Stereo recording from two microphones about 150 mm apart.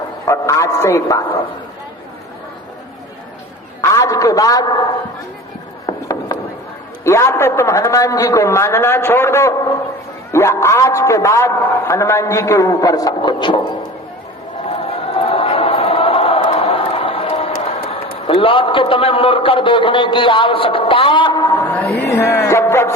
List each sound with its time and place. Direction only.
0.3 s a man's voice: 20° left (ahead or behind)
3.8 s a man's voice: 20° left (ahead or behind)
5.8 s chop: 25° left (ahead or behind)
7.0 s a man's voice: 20° left (ahead or behind)
14.7 s chant: 40° left (ahead or behind)
21.6 s a sound: 10° left (ahead or behind)